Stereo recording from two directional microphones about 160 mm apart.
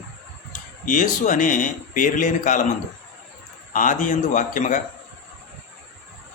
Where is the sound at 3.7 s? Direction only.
55° left (ahead or behind).